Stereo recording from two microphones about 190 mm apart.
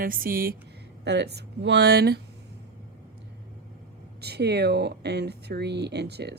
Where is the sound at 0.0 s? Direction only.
50° right (ahead or behind).